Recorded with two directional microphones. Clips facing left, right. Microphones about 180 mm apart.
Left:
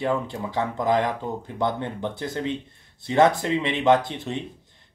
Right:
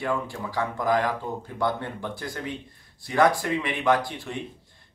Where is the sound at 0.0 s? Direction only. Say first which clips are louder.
Left 3 dB; 20° left (ahead or behind).